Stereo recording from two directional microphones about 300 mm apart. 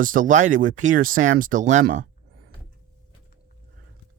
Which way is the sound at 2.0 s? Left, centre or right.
Right.